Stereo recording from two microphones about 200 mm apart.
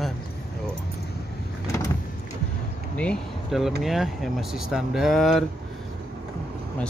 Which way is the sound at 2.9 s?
Centre (ahead or behind).